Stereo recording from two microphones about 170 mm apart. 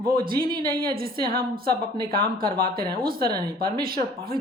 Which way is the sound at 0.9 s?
60° right (ahead or behind).